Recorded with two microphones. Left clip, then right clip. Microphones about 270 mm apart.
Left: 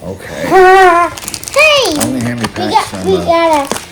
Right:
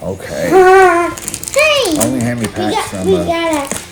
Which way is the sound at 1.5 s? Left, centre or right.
Centre.